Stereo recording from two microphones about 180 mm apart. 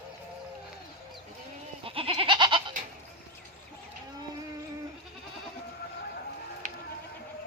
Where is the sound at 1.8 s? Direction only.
30° right (ahead or behind).